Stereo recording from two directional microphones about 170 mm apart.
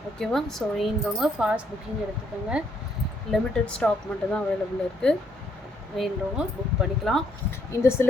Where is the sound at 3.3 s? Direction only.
5° left (ahead or behind).